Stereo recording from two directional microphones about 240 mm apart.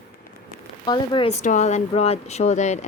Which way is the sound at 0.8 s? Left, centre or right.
Centre.